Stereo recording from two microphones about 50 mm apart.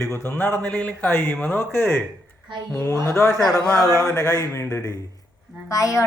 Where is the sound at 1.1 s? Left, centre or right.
Left.